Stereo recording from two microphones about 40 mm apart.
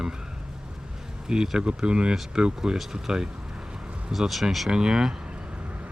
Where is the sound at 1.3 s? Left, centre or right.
Centre.